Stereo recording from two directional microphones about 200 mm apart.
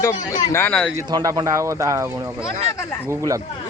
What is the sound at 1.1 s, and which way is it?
A man's voice, 20° right (ahead or behind).